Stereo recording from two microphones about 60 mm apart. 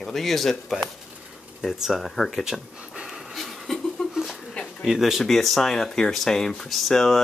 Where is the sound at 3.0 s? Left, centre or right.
Centre.